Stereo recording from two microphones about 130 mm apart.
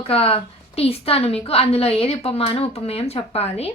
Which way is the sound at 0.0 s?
50° left (ahead or behind).